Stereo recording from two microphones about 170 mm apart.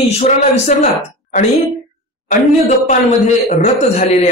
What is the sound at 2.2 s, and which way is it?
A man's voice, 45° left (ahead or behind).